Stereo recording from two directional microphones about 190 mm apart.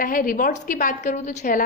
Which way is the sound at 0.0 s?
45° left (ahead or behind).